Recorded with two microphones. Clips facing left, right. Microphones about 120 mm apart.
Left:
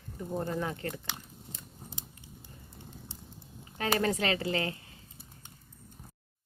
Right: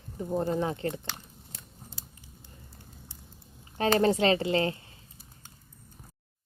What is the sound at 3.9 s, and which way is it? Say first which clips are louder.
Speech: right 6 dB; 30° right (ahead or behind).